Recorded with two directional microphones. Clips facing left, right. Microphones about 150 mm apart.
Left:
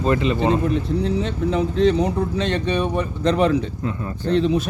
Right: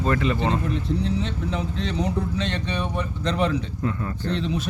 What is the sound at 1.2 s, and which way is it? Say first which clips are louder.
Speech: left 7 dB; 50° left (ahead or behind).